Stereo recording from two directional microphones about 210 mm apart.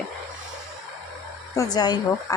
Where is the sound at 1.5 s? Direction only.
20° left (ahead or behind).